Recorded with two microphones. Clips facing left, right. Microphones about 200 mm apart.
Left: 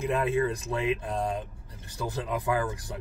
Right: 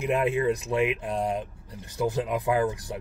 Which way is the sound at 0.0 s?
20° right (ahead or behind).